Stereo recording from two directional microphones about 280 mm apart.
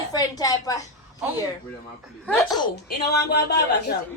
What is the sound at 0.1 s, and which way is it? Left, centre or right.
Speech, centre.